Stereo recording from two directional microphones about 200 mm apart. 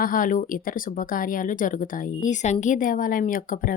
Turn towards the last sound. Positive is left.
turn(degrees=45)  # may be behind; listen again after turning